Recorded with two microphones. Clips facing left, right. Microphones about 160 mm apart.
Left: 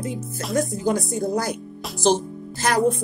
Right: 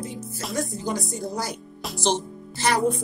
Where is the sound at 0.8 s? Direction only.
50° left (ahead or behind).